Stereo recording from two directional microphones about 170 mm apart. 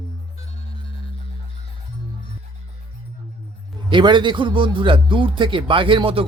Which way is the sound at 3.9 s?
30° right (ahead or behind).